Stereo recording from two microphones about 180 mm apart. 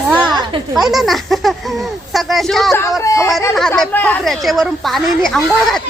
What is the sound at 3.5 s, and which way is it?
A woman's voice, centre (ahead or behind).